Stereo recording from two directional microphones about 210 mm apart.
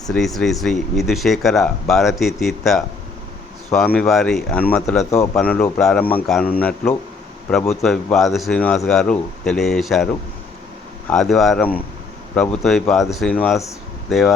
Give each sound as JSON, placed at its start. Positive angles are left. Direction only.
{"t": 0.1, "sound": "a man's voice", "side_deg": 0}
{"t": 11.1, "sound": "speech", "side_deg": 0}